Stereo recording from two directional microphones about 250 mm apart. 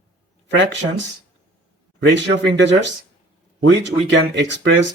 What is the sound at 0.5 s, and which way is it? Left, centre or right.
Speech, right.